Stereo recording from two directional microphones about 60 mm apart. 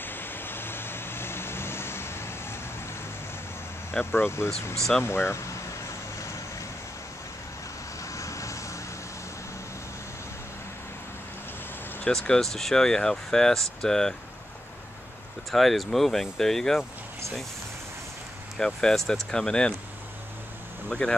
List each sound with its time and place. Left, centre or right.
0.0 s vehicle: left
4.0 s speech: left
4.7 s speech: centre
5.0 s speech: left
8.0 s vehicle: left
12.1 s speech: centre
15.5 s speech: centre
18.8 s speech: centre
20.9 s speech: centre